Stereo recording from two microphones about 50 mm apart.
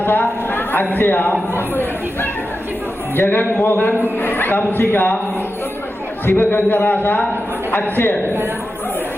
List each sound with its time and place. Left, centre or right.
0.0 s a sound: left
0.9 s a man's voice: left
6.2 s a man's voice: left